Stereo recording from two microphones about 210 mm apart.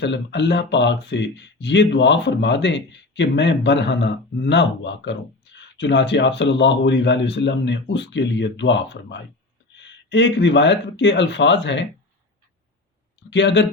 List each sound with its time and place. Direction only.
0.0 s speech: 55° left (ahead or behind)
13.3 s speech: 60° left (ahead or behind)